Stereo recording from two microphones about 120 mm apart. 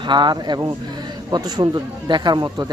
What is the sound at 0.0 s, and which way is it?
Speech, 40° right (ahead or behind).